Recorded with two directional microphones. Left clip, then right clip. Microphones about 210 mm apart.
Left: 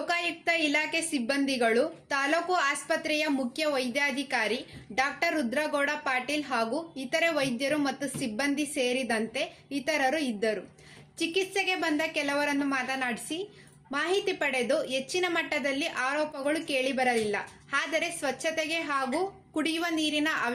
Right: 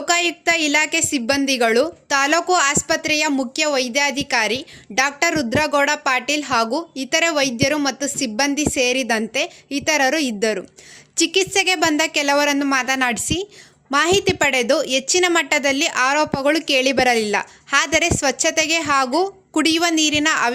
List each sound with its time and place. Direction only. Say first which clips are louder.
0.1 s a woman's voice: right 11 dB; 50° right (ahead or behind)